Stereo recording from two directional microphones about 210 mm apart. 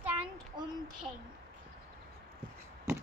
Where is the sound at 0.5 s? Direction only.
20° right (ahead or behind).